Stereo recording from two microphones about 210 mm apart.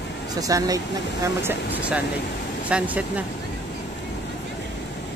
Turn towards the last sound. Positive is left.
turn(degrees=-5)  # may be behind; listen again after turning